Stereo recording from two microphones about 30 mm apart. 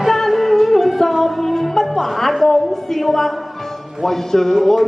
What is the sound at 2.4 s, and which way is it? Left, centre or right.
A woman's voice, centre.